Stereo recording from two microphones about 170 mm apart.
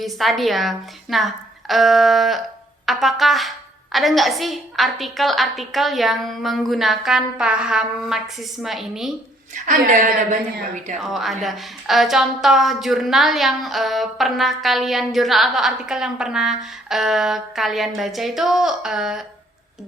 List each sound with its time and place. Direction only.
0.0 s a woman's voice: centre (ahead or behind)
9.6 s a woman's voice: 50° right (ahead or behind)
11.0 s a woman's voice: centre (ahead or behind)